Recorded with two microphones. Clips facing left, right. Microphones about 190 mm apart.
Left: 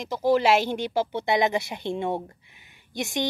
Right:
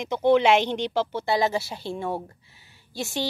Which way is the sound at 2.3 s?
15° left (ahead or behind).